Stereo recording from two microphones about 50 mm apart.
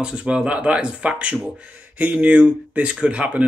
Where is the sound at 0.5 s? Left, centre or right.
Right.